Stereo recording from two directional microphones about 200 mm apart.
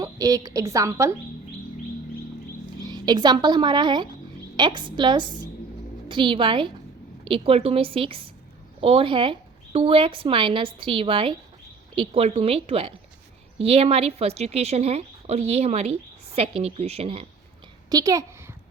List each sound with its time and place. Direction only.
0.0 s a woman's voice: 20° right (ahead or behind)
2.8 s a woman's voice: 20° right (ahead or behind)
17.8 s a sound: 20° right (ahead or behind)